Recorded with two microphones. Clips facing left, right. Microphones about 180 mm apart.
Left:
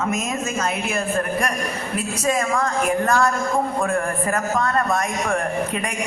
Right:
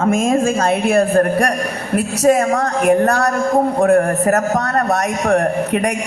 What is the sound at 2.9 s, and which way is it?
A woman's voice, 65° right (ahead or behind).